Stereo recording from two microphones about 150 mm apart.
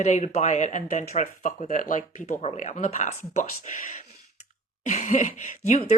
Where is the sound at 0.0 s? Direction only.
50° left (ahead or behind).